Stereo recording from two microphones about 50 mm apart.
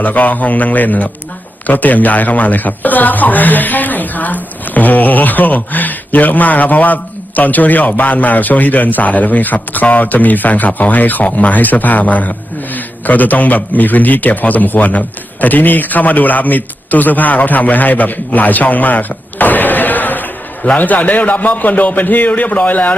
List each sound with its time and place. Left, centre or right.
0.0 s a man's voice: left